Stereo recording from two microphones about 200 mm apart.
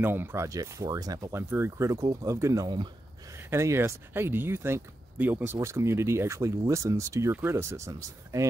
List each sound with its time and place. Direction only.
0.0 s speech: 10° right (ahead or behind)